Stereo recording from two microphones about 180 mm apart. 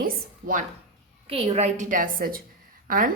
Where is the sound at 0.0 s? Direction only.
50° right (ahead or behind).